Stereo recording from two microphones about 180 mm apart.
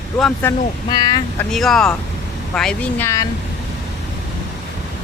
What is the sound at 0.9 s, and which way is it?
Speech, 20° left (ahead or behind).